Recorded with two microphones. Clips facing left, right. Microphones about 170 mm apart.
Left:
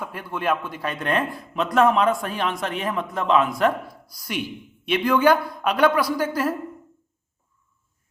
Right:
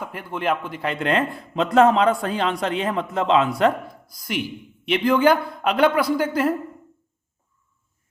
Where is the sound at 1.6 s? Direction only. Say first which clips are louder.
Right 3 dB; 30° right (ahead or behind).